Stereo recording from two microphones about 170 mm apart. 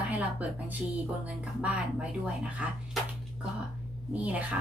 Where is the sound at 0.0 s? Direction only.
10° right (ahead or behind).